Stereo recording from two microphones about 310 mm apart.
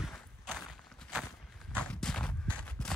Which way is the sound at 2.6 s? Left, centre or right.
Centre.